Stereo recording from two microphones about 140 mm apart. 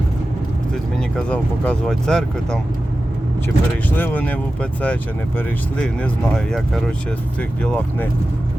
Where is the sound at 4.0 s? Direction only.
15° left (ahead or behind).